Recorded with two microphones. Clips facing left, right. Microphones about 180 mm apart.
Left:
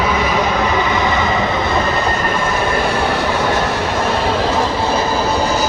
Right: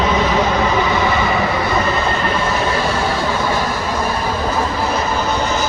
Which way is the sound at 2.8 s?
65° left (ahead or behind).